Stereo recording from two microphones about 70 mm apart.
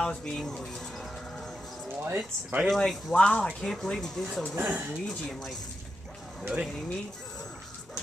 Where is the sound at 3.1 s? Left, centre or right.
Centre.